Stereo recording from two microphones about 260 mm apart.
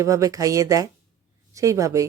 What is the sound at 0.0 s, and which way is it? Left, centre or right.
Speech, centre.